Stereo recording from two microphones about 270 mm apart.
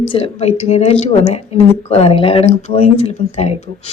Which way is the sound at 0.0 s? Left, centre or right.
Left.